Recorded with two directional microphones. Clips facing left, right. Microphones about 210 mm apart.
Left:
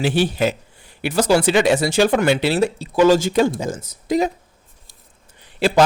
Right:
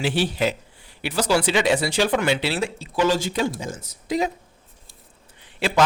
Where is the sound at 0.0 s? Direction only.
45° left (ahead or behind).